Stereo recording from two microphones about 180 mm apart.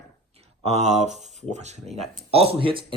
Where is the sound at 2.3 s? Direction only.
30° right (ahead or behind).